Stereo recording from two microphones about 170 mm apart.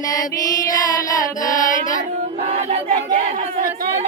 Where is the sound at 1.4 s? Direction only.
50° left (ahead or behind).